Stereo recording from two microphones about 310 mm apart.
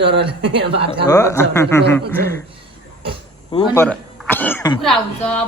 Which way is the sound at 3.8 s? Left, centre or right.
Centre.